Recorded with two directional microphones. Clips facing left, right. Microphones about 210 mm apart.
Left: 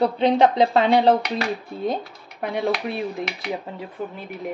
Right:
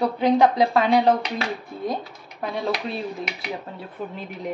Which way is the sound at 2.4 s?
15° left (ahead or behind).